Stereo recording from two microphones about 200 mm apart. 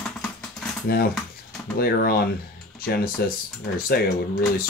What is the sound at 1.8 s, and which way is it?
Speech, 50° left (ahead or behind).